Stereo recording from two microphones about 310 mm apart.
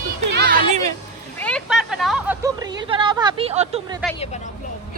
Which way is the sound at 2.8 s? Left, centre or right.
Centre.